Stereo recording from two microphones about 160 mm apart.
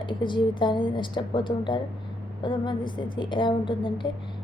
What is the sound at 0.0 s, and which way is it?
A woman's voice, 30° left (ahead or behind).